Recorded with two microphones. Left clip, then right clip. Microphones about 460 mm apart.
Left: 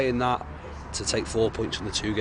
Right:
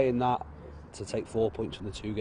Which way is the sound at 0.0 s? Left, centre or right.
Centre.